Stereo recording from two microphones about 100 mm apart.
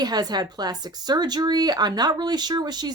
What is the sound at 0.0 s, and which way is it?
A woman's voice, 45° right (ahead or behind).